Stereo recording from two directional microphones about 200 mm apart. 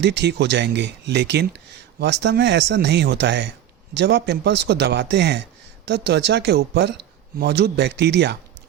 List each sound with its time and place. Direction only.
0.0 s speech: 60° right (ahead or behind)